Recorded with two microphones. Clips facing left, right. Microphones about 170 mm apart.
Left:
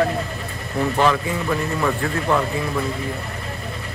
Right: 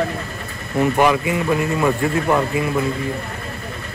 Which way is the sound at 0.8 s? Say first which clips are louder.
Right 3 dB; 15° right (ahead or behind).